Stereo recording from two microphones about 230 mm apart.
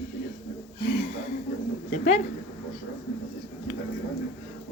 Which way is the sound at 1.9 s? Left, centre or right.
Left.